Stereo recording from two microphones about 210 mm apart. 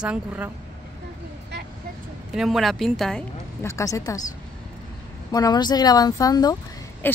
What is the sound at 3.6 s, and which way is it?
Speech, 15° left (ahead or behind).